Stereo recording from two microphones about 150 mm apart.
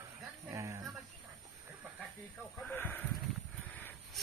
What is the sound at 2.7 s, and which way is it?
Sheep, 10° left (ahead or behind).